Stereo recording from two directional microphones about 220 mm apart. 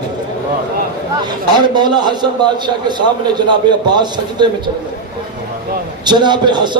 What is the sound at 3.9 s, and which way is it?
Speech, 20° right (ahead or behind).